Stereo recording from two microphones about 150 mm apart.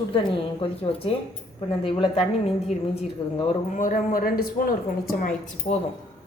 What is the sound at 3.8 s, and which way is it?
Speech, 65° left (ahead or behind).